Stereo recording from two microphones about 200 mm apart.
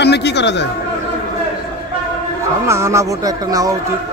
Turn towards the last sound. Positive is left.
turn(degrees=-15)  # may be behind; listen again after turning